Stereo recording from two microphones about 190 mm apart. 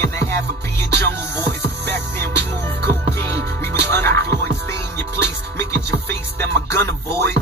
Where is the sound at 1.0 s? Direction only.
10° left (ahead or behind).